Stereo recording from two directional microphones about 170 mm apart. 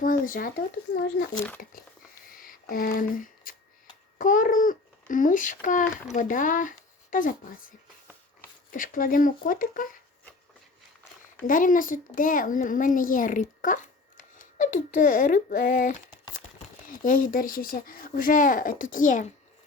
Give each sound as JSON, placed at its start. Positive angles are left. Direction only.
{"t": 0.0, "sound": "speech", "side_deg": 55}
{"t": 1.6, "sound": "speech", "side_deg": 60}
{"t": 2.3, "sound": "a sound", "side_deg": 55}
{"t": 4.2, "sound": "a child's voice", "side_deg": 50}
{"t": 8.7, "sound": "speech", "side_deg": 55}
{"t": 11.4, "sound": "speech", "side_deg": 50}
{"t": 17.0, "sound": "speech", "side_deg": 55}